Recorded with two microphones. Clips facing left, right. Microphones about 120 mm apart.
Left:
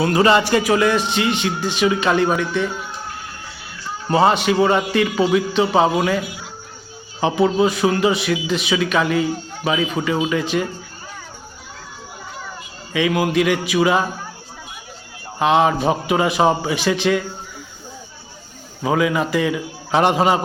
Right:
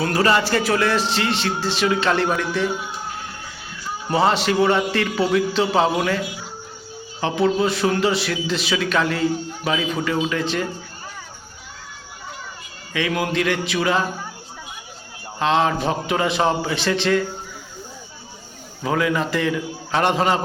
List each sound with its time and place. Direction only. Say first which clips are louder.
0.1 s a man's voice: left 3 dB; 20° left (ahead or behind)
4.1 s a man's voice: left 3 dB; centre (ahead or behind)
4.5 s a man's voice: left 2 dB; 10° left (ahead or behind)
7.2 s a man's voice: left 3 dB; 15° left (ahead or behind)
7.7 s a man's voice: left 2 dB; centre (ahead or behind)
12.9 s a man's voice: left 4 dB; 10° left (ahead or behind)
15.4 s a man's voice: left 3 dB; 15° left (ahead or behind)
18.8 s a man's voice: left 3 dB; 10° left (ahead or behind)